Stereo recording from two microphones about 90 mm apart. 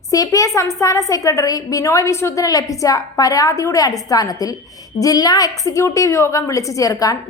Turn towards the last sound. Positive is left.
turn(degrees=40)  # may be behind; listen again after turning